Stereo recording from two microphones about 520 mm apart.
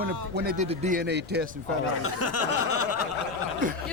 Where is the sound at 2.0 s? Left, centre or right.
Left.